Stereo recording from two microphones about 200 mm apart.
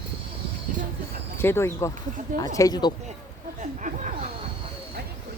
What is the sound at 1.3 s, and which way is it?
Speech, 10° left (ahead or behind).